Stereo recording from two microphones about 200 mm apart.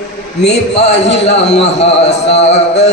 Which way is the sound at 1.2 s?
60° left (ahead or behind).